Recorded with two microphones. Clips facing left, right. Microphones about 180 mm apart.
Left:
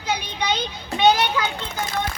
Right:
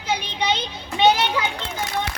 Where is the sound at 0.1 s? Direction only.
25° right (ahead or behind).